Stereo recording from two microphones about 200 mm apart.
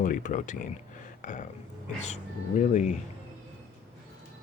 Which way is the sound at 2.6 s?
35° left (ahead or behind).